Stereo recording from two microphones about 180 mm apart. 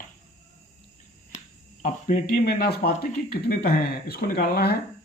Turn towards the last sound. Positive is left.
turn(degrees=60)  # may be behind; listen again after turning